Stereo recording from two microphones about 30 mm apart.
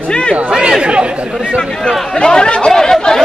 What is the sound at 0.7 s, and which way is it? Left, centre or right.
Speech, right.